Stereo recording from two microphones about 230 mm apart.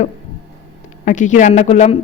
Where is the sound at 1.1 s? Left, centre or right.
Left.